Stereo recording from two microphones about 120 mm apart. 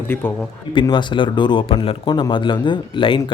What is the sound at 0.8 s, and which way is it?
A man's voice, 40° left (ahead or behind).